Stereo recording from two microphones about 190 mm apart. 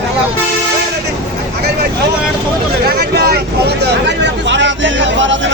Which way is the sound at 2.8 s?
55° right (ahead or behind).